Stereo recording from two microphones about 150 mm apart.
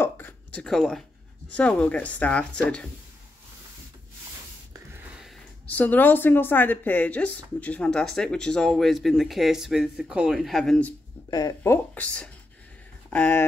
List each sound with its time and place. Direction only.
0.0 s a sound: 10° left (ahead or behind)
1.5 s speech: 10° left (ahead or behind)
5.7 s speech: 10° left (ahead or behind)
11.2 s speech: 25° left (ahead or behind)